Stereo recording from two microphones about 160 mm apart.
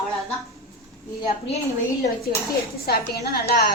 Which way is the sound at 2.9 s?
80° left.